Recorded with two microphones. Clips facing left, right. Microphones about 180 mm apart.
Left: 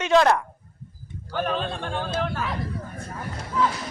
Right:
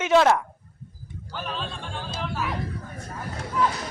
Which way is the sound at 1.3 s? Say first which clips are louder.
Left 7 dB; 55° left (ahead or behind).